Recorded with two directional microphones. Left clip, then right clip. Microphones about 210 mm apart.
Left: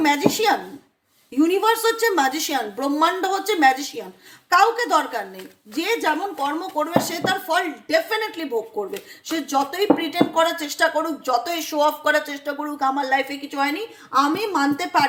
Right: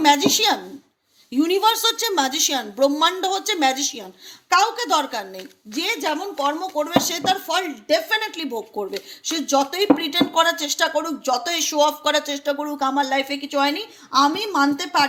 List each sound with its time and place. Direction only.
0.0 s speech: 35° right (ahead or behind)